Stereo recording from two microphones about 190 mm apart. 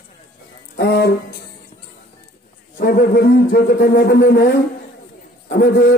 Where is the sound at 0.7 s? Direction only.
60° left (ahead or behind).